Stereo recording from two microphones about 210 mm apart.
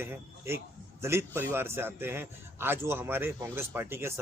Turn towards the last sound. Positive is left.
turn(degrees=-10)  # may be behind; listen again after turning